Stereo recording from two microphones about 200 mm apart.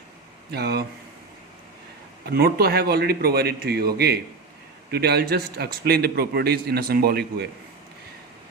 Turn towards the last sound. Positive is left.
turn(degrees=-50)  # may be behind; listen again after turning